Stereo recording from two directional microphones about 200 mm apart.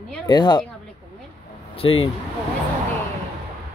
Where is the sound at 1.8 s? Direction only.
25° left (ahead or behind).